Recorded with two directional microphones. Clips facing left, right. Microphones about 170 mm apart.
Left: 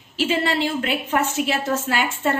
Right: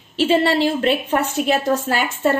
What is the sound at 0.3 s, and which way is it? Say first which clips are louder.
A woman's voice: right 6 dB; 35° right (ahead or behind).